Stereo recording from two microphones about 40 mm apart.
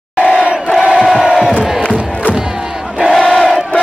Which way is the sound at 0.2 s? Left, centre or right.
Right.